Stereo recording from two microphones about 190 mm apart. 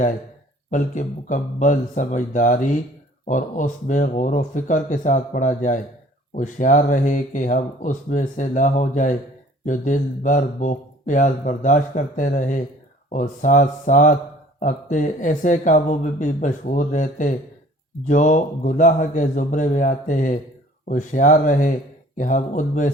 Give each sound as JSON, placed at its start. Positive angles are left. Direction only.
{"t": 0.7, "sound": "speech", "side_deg": 40}